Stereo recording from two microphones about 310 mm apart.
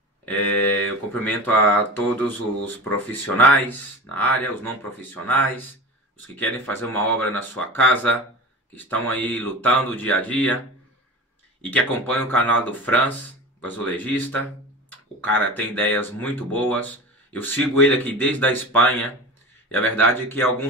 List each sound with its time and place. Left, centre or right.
0.2 s a sound: centre
1.2 s speech: centre
11.6 s speech: centre